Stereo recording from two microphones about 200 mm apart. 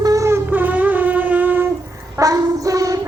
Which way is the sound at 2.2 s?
15° right (ahead or behind).